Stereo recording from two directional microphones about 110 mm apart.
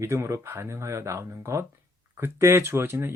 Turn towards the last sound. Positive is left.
turn(degrees=-25)  # may be behind; listen again after turning